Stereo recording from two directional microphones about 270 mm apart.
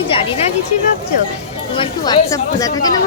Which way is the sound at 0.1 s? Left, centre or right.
Left.